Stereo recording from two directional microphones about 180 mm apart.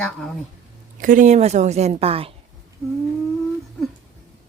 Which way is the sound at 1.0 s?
45° right (ahead or behind).